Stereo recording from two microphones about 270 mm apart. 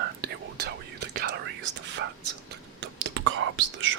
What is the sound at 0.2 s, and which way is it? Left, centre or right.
Whispering, right.